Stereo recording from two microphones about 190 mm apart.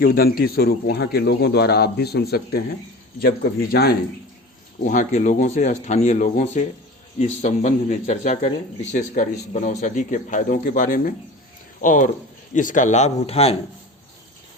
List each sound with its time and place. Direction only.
0.0 s speech: 50° left (ahead or behind)
4.9 s speech: 40° left (ahead or behind)